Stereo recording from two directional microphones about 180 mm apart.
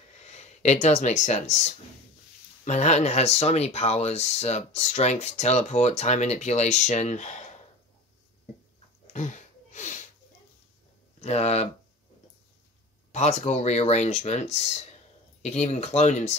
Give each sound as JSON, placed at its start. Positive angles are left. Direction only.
{"t": 0.2, "sound": "speech", "side_deg": 35}
{"t": 9.0, "sound": "a sound", "side_deg": 40}
{"t": 11.1, "sound": "speech", "side_deg": 35}
{"t": 13.1, "sound": "speech", "side_deg": 40}